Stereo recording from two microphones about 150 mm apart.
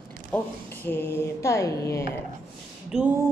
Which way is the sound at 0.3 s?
15° left (ahead or behind).